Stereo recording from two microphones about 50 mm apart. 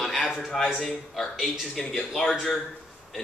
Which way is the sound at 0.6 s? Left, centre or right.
Centre.